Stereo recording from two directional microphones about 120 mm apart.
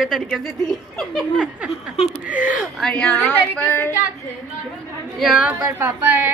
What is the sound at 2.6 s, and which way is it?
Speech, 5° left (ahead or behind).